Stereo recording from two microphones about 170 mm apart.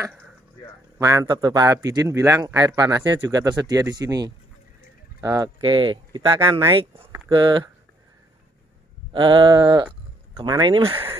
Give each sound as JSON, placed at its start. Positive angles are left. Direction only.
{"t": 0.9, "sound": "speech", "side_deg": -20}
{"t": 5.6, "sound": "speech", "side_deg": -30}
{"t": 9.1, "sound": "speech", "side_deg": -30}